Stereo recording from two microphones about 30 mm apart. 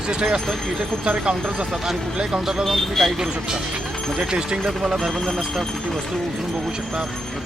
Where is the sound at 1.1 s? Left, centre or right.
Right.